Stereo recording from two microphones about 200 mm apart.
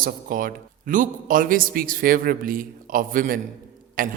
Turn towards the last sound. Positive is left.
turn(degrees=-45)  # may be behind; listen again after turning